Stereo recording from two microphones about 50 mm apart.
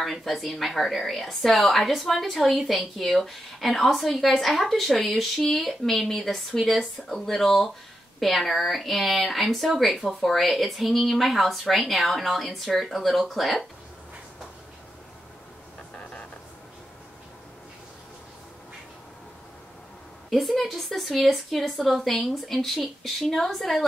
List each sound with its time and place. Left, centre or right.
0.0 s speech: centre
15.9 s a sound: left
20.2 s speech: centre